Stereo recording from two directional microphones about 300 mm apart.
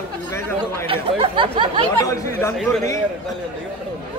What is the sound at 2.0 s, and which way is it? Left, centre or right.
Speech, centre.